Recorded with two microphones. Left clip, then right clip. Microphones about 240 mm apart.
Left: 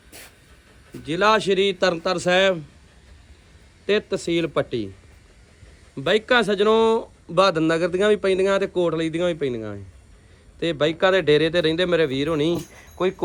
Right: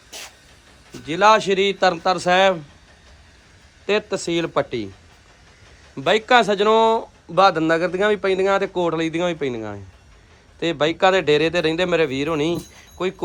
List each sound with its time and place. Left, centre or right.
1.0 s speech: centre
3.8 s speech: centre
6.0 s speech: centre